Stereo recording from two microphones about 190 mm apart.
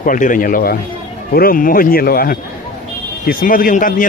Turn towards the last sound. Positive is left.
turn(degrees=45)  # may be behind; listen again after turning